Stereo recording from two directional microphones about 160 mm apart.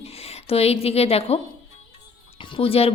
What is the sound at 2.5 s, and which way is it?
Speech, 35° left (ahead or behind).